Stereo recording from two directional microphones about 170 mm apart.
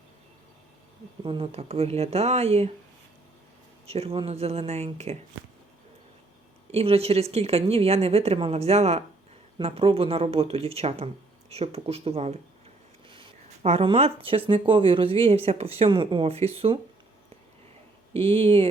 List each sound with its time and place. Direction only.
1.2 s speech: 30° right (ahead or behind)
3.8 s speech: 35° right (ahead or behind)
6.7 s speech: 35° right (ahead or behind)
18.1 s speech: 35° right (ahead or behind)